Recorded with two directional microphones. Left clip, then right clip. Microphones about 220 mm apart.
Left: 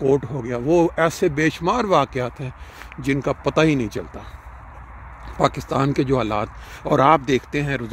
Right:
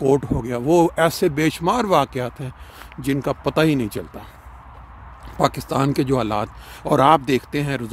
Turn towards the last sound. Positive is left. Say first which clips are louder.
# even
turn(degrees=-15)  # may be behind; listen again after turning